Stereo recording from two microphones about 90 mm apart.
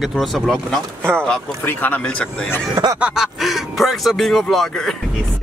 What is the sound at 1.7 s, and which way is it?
Speech, 20° left (ahead or behind).